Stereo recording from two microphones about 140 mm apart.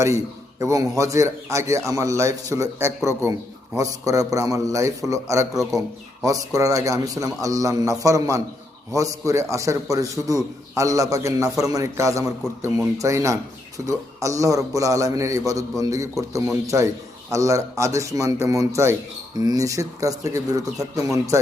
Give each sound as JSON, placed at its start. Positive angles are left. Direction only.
{"t": 0.6, "sound": "a man's voice", "side_deg": -25}